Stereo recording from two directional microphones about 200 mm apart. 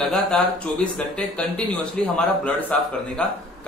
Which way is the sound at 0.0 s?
Centre (ahead or behind).